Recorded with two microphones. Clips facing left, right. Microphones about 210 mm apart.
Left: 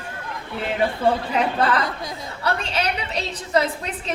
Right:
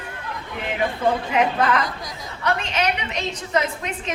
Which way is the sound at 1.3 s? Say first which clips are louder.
Right 1 dB; 35° left (ahead or behind).